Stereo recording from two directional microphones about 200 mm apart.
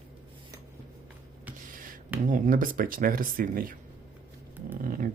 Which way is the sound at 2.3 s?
40° right (ahead or behind).